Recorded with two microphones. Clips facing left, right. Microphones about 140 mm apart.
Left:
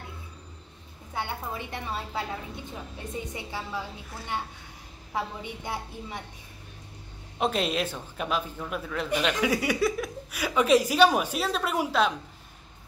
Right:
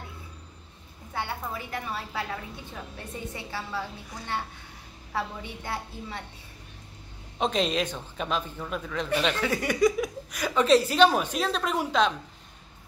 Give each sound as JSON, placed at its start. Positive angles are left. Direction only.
{"t": 1.1, "sound": "a woman's voice", "side_deg": 20}
{"t": 3.3, "sound": "speech", "side_deg": 15}
{"t": 5.1, "sound": "speech", "side_deg": 15}
{"t": 7.3, "sound": "speech", "side_deg": 5}